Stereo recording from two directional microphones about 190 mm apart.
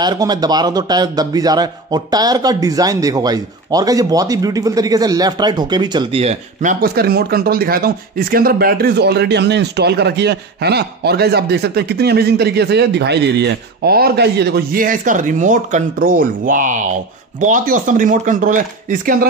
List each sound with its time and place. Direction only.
0.0 s a man's voice: 20° right (ahead or behind); by 19.1 s 45° right (ahead or behind)